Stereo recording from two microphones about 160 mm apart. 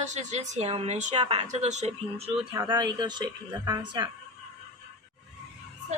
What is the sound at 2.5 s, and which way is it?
A woman's voice, 25° right (ahead or behind).